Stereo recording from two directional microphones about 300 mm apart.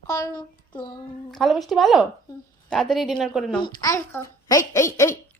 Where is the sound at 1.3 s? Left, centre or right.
Centre.